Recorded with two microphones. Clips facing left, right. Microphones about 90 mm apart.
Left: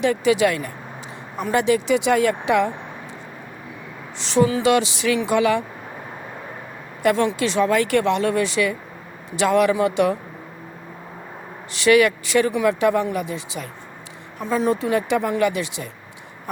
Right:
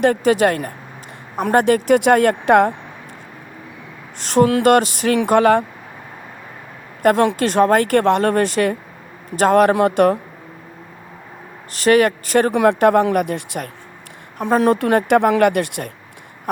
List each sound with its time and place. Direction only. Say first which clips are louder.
0.0 s speech: right 3 dB; 50° right (ahead or behind)
4.2 s speech: right 4 dB; 50° right (ahead or behind)
7.0 s speech: right 4 dB; 50° right (ahead or behind)
11.7 s speech: right 2 dB; 45° right (ahead or behind)